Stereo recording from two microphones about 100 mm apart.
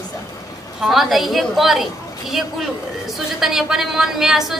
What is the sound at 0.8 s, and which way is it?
A woman's voice, centre (ahead or behind).